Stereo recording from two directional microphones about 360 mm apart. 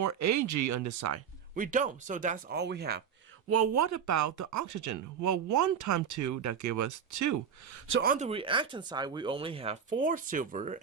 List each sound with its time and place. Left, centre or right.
0.0 s speech: right
1.5 s speech: right
3.5 s speech: right
7.9 s speech: right